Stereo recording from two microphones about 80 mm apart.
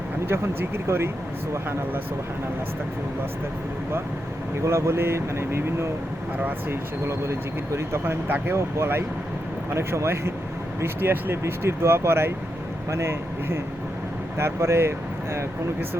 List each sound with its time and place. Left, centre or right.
0.3 s speech: right
4.6 s speech: right